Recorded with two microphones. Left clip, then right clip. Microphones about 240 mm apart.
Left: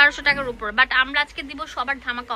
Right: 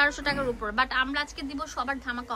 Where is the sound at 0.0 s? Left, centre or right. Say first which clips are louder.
Left 8 dB; centre.